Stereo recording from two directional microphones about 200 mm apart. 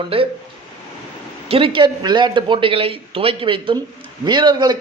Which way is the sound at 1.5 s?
30° right (ahead or behind).